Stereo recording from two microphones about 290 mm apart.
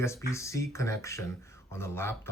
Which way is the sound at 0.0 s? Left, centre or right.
Centre.